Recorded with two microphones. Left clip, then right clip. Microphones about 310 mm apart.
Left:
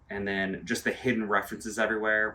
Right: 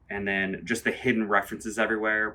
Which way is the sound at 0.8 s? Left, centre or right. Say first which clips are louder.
Right 3 dB; centre.